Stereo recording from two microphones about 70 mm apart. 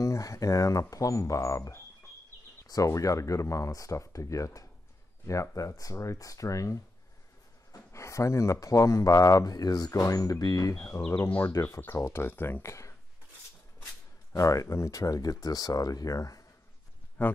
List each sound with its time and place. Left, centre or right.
0.0 s speech: left
11.2 s speech: left
12.0 s speech: left
14.3 s speech: left
17.2 s speech: left